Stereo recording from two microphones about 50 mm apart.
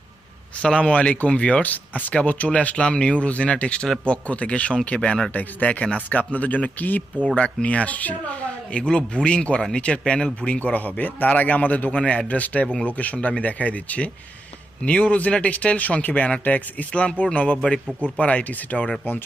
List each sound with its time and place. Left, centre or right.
0.6 s speech: left
5.3 s speech: left